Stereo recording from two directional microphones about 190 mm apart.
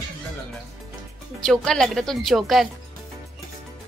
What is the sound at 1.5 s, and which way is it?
A woman's voice, centre (ahead or behind).